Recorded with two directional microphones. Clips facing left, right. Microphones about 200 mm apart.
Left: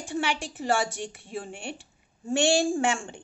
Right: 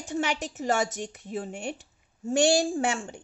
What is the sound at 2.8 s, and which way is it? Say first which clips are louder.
Speech: left 1 dB; 35° right (ahead or behind).